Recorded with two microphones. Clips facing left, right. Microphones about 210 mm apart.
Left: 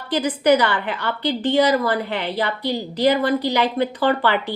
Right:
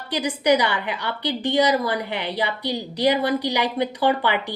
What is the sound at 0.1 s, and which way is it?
A woman's voice, 15° right (ahead or behind).